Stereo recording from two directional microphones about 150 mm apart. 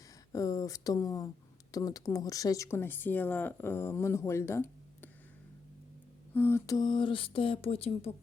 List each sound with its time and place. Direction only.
0.3 s speech: 25° left (ahead or behind)
6.3 s speech: 15° left (ahead or behind)
6.7 s a sound: 30° left (ahead or behind)